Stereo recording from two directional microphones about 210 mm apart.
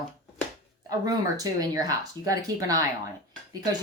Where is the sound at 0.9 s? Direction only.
15° right (ahead or behind).